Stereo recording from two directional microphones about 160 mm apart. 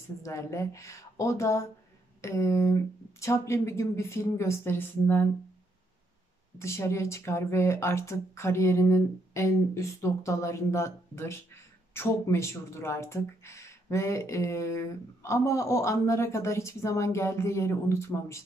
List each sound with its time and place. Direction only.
0.2 s a woman's voice: 20° left (ahead or behind)
6.6 s speech: 15° left (ahead or behind)